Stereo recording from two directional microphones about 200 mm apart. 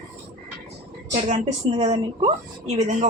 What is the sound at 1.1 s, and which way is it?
Speech, 35° right (ahead or behind).